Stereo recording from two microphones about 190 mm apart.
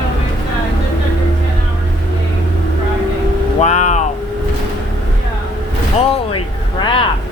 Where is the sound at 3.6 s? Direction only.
35° left (ahead or behind).